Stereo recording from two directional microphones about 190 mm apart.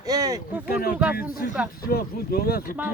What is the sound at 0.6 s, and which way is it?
Speech, 50° left (ahead or behind).